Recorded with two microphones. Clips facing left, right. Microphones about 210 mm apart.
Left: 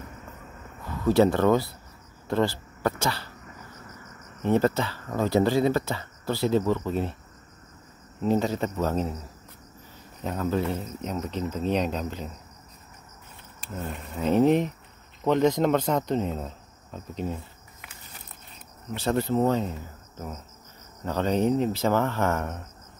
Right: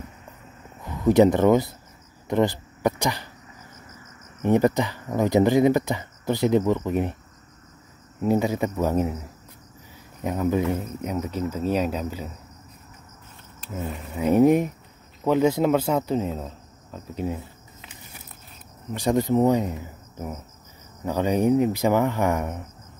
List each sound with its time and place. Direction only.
1.0 s speech: 15° right (ahead or behind)
4.4 s speech: 15° right (ahead or behind)
8.2 s speech: 10° right (ahead or behind)
13.7 s speech: 5° right (ahead or behind)
18.9 s speech: 15° right (ahead or behind)